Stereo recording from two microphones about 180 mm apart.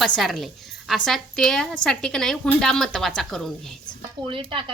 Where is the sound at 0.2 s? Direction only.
Centre (ahead or behind).